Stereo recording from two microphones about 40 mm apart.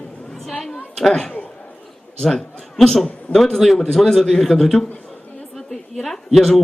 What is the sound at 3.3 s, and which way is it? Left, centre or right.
A man's voice, centre.